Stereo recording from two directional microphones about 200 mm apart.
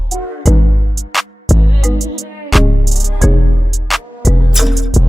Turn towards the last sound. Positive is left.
turn(degrees=0)  # may be behind; listen again after turning